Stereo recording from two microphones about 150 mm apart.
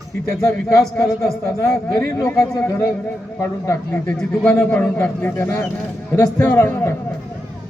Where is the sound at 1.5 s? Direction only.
20° left (ahead or behind).